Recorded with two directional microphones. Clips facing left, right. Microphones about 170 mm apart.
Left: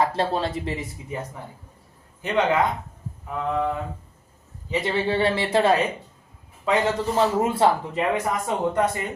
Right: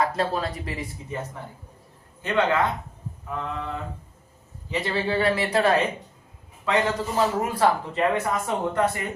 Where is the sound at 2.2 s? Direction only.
15° left (ahead or behind).